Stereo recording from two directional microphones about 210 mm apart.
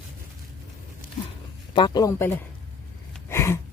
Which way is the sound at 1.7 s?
20° left (ahead or behind).